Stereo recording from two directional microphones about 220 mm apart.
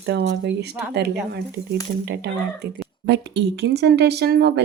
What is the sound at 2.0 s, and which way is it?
Speech, 50° right (ahead or behind).